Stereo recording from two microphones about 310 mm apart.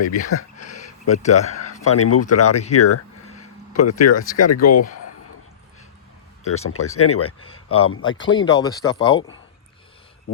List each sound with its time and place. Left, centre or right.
0.0 s speech: left
1.8 s speech: left
6.4 s speech: left
8.5 s speech: centre